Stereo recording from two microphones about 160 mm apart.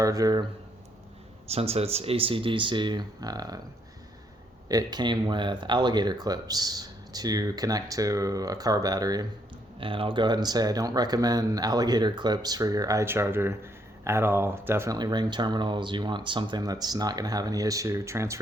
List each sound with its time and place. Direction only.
0.0 s speech: 20° right (ahead or behind)
1.5 s speech: 40° right (ahead or behind); by 3.6 s 25° right (ahead or behind)
4.7 s speech: 25° right (ahead or behind)